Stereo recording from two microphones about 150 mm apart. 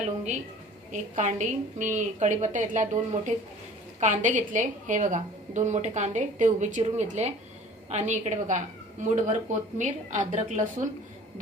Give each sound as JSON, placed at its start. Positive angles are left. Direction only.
{"t": 0.9, "sound": "a woman's voice", "side_deg": -55}